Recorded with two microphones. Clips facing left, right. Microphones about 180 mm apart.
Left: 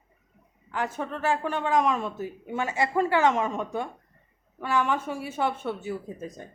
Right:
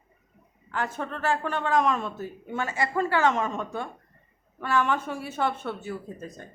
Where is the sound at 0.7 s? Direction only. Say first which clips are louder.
Left 1 dB; 15° left (ahead or behind).